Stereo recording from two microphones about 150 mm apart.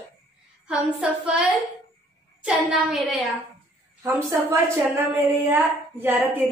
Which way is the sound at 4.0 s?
20° right (ahead or behind).